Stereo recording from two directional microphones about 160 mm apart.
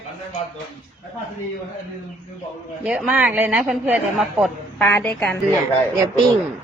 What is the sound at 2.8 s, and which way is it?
A woman's voice, 5° right (ahead or behind).